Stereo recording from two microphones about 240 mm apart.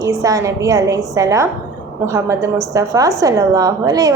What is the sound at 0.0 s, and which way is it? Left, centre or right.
Speech, centre.